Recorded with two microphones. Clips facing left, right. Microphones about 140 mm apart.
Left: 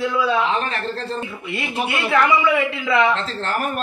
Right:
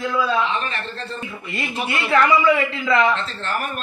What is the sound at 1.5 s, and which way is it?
A man's voice, 10° left (ahead or behind).